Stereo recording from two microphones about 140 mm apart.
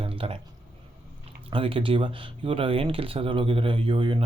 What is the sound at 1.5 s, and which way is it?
A man's voice, 40° right (ahead or behind).